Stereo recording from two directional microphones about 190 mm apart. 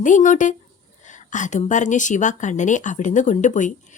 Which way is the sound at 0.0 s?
40° left (ahead or behind).